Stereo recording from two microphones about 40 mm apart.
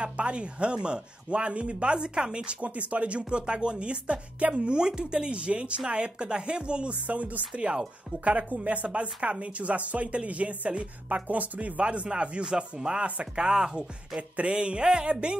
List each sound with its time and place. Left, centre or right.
0.0 s speech: right
7.1 s a woman's voice: right
11.2 s a woman's voice: right
13.5 s speech: centre
14.3 s a woman's voice: right